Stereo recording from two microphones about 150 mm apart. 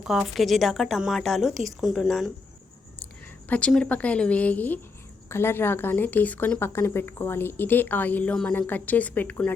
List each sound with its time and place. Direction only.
0.0 s speech: centre (ahead or behind)
3.5 s speech: 5° left (ahead or behind)